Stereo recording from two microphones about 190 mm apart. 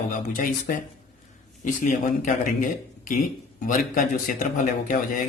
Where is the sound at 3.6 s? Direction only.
45° left (ahead or behind).